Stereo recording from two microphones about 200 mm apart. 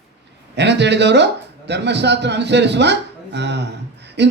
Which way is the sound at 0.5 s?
60° right (ahead or behind).